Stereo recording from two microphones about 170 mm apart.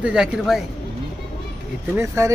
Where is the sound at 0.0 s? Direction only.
5° right (ahead or behind).